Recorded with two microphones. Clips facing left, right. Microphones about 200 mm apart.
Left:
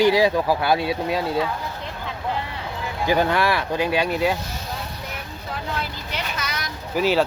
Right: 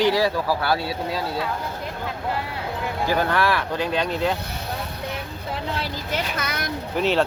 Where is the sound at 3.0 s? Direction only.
15° left (ahead or behind).